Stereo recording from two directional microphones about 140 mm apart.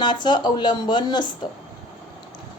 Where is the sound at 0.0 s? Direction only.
30° left (ahead or behind).